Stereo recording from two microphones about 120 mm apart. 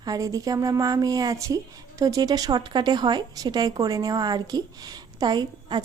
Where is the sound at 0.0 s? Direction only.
30° right (ahead or behind).